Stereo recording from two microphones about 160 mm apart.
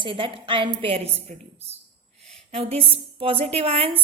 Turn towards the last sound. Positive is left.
turn(degrees=-35)  # may be behind; listen again after turning